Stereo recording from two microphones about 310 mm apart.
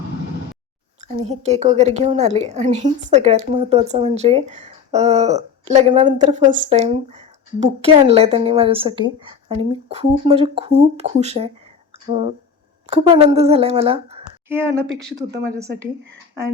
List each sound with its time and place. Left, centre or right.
1.0 s a woman's voice: right